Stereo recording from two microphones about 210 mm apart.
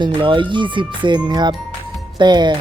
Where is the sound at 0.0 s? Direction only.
25° right (ahead or behind).